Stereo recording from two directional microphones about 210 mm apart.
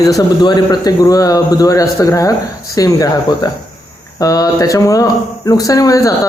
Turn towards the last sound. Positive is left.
turn(degrees=15)  # may be behind; listen again after turning